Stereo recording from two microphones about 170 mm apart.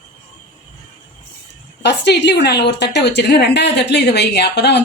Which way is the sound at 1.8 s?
85° left.